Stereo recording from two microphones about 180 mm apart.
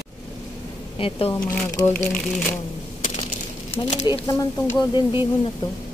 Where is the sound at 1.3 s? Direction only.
10° left (ahead or behind).